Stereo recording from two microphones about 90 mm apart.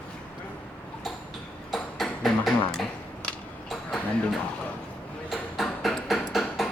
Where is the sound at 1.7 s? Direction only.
Centre (ahead or behind).